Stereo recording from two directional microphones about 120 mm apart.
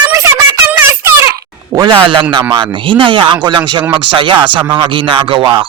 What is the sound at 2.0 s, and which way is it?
Speech, 45° right (ahead or behind).